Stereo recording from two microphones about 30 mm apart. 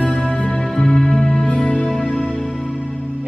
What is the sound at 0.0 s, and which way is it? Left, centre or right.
Music, left.